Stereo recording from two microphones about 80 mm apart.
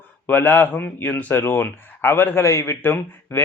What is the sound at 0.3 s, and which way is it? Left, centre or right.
A man's voice, left.